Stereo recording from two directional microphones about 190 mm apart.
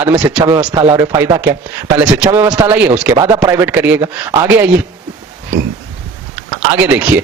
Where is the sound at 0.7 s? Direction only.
25° right (ahead or behind).